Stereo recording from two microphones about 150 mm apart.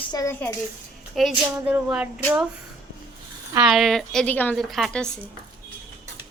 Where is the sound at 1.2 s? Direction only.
Centre (ahead or behind).